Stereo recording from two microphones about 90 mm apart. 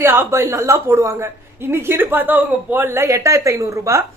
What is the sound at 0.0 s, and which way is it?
Speech, 25° right (ahead or behind).